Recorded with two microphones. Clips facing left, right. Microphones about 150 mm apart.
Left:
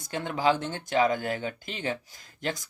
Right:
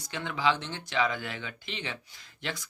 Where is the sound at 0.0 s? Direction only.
45° left (ahead or behind).